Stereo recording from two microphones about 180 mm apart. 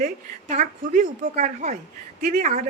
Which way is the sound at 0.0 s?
45° right (ahead or behind).